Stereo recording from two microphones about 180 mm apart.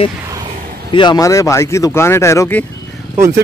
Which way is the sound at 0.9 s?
25° left (ahead or behind).